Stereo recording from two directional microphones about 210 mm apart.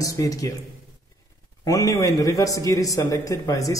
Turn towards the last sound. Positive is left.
turn(degrees=15)  # may be behind; listen again after turning